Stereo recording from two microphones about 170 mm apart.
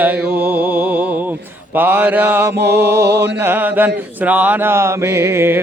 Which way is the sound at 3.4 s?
10° right (ahead or behind).